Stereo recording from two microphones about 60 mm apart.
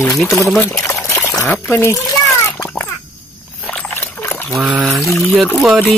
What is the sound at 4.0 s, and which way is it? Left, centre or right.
Trickle, left.